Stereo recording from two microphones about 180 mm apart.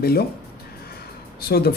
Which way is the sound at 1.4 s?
60° left (ahead or behind).